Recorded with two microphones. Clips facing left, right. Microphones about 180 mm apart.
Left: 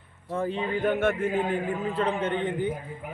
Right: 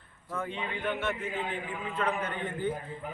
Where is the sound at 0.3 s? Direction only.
35° left (ahead or behind); by 2.7 s 20° left (ahead or behind).